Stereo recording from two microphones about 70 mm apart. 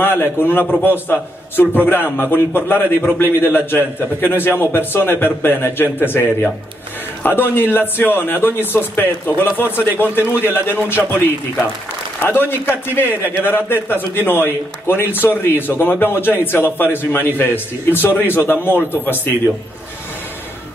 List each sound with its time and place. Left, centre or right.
0.0 s a man's voice: left